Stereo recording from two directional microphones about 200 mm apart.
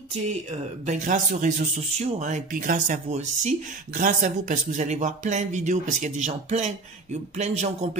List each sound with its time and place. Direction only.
0.8 s speech: 40° right (ahead or behind)